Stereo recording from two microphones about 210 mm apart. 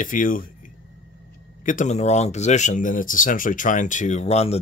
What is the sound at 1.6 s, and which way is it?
Speech, 35° left (ahead or behind).